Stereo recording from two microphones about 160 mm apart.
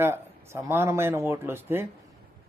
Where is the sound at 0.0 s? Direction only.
15° right (ahead or behind).